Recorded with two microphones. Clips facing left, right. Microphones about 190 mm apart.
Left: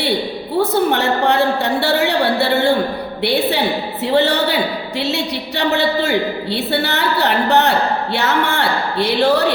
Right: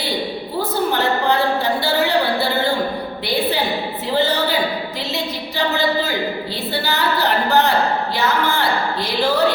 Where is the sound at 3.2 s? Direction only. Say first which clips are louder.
Left 4 dB; 70° left (ahead or behind).